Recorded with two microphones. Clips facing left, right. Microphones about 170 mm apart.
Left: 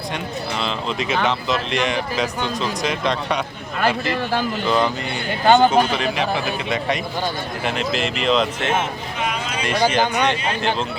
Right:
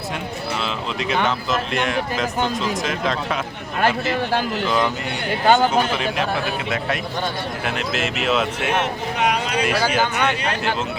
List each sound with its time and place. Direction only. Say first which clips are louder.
0.6 s speech: left 1 dB; centre (ahead or behind)
5.5 s speech: left 3 dB; centre (ahead or behind)
8.7 s a sound: right 1 dB; 70° right (ahead or behind)
9.6 s speech: left 4 dB; 5° right (ahead or behind)